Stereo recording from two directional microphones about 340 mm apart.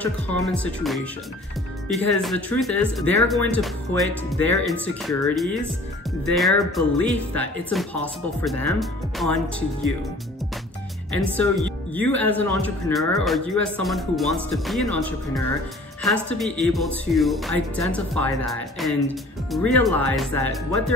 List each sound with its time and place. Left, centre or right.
0.0 s speech: centre
11.9 s a woman's voice: centre